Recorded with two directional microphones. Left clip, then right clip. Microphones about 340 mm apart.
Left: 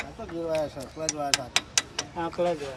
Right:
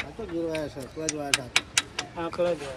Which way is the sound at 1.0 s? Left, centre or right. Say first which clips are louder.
Even; left.